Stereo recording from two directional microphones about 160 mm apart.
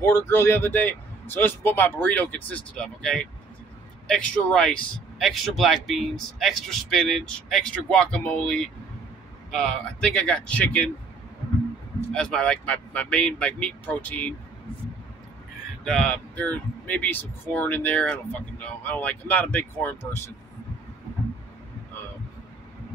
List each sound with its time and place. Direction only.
0.0 s a man's voice: 15° left (ahead or behind)
12.1 s speech: 5° left (ahead or behind)
15.8 s speech: 5° left (ahead or behind)